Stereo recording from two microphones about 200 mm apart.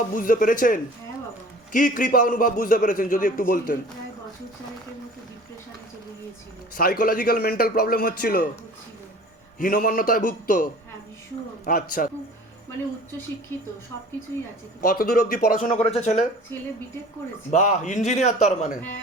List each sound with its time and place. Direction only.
0.1 s a man's voice: 40° left (ahead or behind)
6.7 s a man's voice: 45° left (ahead or behind)
9.6 s a man's voice: 45° left (ahead or behind)
14.8 s a man's voice: 45° left (ahead or behind)
15.7 s a man's voice: 30° left (ahead or behind)
17.5 s a man's voice: 35° left (ahead or behind)